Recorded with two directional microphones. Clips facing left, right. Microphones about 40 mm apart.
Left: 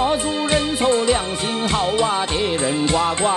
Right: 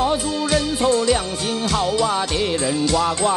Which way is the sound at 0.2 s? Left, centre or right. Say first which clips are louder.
Left 1 dB; left.